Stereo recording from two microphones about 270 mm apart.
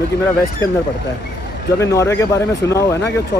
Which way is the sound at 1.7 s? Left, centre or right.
Centre.